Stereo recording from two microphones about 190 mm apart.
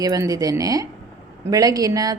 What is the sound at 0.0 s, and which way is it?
A woman's voice, 20° right (ahead or behind).